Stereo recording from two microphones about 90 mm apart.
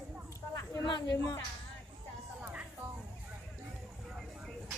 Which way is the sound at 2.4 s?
15° right (ahead or behind).